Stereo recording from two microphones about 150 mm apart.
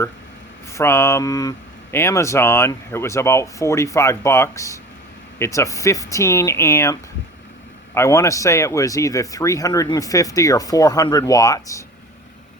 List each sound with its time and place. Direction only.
0.7 s speech: 20° left (ahead or behind)
7.9 s speech: 20° left (ahead or behind)